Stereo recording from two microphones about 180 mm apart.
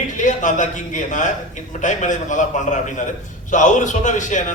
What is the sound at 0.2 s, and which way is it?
A man's voice, 45° left (ahead or behind).